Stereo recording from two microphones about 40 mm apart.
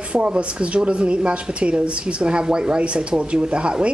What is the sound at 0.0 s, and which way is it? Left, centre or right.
A woman's voice, right.